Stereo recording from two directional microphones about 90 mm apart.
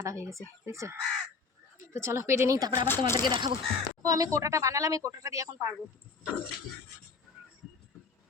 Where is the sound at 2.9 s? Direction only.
30° left (ahead or behind).